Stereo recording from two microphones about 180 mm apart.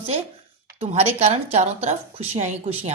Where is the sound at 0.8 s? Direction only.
35° right (ahead or behind).